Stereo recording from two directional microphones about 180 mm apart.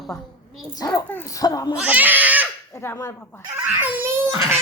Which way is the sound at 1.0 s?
15° left (ahead or behind).